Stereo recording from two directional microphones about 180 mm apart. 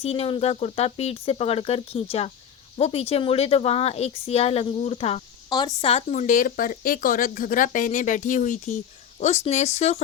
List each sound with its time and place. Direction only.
0.0 s speech: 35° left (ahead or behind)